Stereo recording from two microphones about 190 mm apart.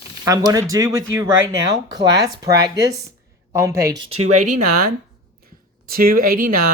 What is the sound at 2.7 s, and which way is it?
Speech, 15° right (ahead or behind).